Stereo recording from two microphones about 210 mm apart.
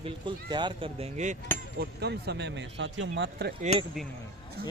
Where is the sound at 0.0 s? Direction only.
20° right (ahead or behind).